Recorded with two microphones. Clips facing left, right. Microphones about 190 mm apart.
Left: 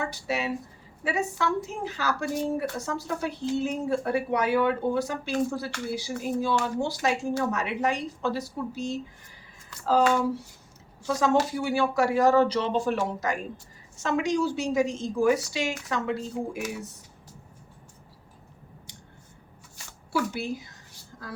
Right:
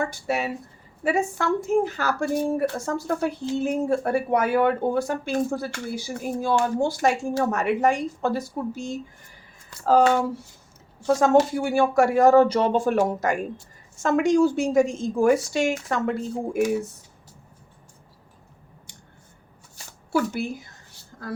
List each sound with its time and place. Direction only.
0.0 s speech: 50° right (ahead or behind)
11.0 s speech: 50° right (ahead or behind)
20.1 s speech: 50° right (ahead or behind)